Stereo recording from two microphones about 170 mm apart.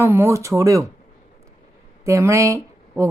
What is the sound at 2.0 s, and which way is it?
Speech, 15° right (ahead or behind).